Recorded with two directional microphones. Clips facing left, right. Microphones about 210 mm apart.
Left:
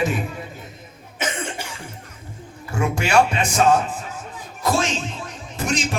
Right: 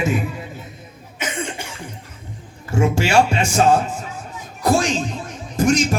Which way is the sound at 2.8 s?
30° right (ahead or behind).